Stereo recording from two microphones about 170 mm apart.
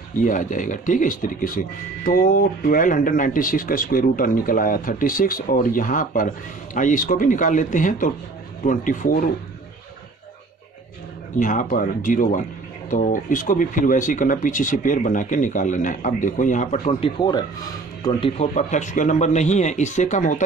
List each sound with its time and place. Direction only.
0.2 s speech: 50° left (ahead or behind)
11.3 s speech: 50° left (ahead or behind)
17.0 s speech: 25° left (ahead or behind)
18.4 s speech: 45° left (ahead or behind)